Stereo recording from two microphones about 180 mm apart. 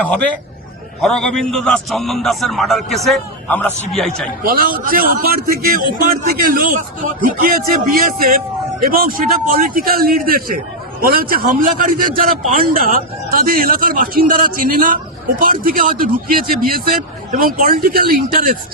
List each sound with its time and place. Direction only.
1.0 s a man's voice: 5° left (ahead or behind)
4.4 s a man's voice: 55° right (ahead or behind)